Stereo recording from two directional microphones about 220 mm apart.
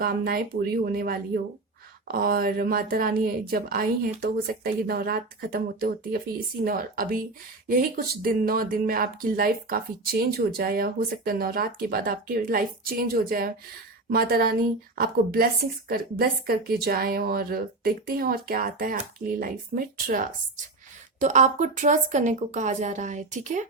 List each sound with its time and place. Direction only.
0.0 s a woman's voice: 40° right (ahead or behind)